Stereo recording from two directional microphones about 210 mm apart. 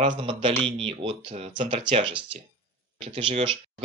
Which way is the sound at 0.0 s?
25° right (ahead or behind).